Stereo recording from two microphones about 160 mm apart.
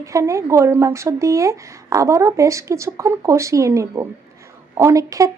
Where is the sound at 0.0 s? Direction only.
20° right (ahead or behind).